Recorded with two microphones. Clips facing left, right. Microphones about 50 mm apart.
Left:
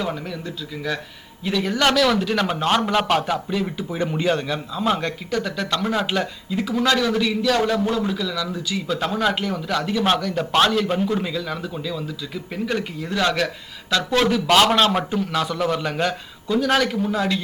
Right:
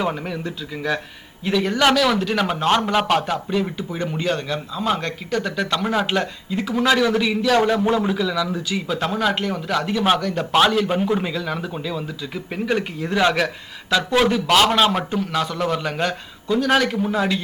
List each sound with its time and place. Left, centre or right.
0.0 s a man's voice: right
1.5 s speech: centre
3.8 s speech: centre
7.9 s a man's voice: right
8.9 s speech: centre
14.4 s speech: centre